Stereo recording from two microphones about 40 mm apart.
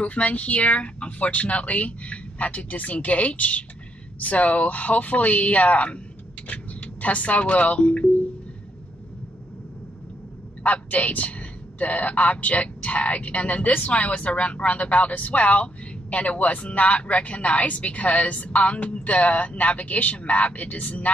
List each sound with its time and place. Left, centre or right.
0.0 s a man's voice: left
10.6 s a man's voice: left